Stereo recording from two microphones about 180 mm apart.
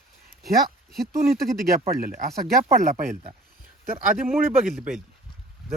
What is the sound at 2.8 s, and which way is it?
Speech, 45° right (ahead or behind).